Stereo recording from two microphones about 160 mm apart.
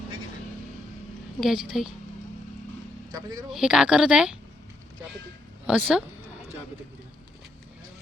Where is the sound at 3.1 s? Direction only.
25° right (ahead or behind).